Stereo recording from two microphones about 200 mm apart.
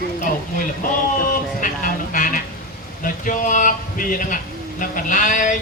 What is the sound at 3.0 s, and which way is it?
Speech, 40° left (ahead or behind).